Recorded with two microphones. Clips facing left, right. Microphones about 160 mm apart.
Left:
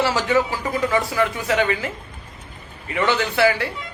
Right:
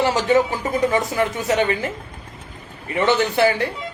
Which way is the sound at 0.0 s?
20° right (ahead or behind).